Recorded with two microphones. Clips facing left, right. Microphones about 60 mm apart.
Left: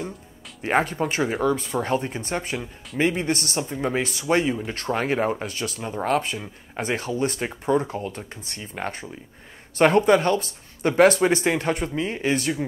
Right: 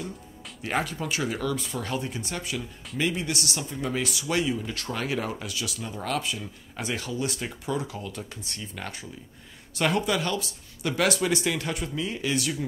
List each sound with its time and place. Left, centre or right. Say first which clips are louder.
0.6 s speech: left 7 dB; left